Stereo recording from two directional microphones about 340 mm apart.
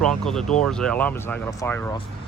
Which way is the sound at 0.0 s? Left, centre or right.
Centre.